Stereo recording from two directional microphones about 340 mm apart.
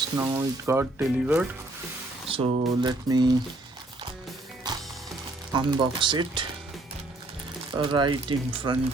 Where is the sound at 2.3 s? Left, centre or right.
Centre.